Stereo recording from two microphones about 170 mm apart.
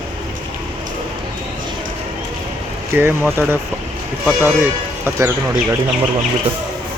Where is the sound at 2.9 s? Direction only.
10° right (ahead or behind).